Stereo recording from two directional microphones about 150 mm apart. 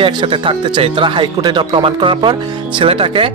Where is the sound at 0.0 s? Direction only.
35° right (ahead or behind).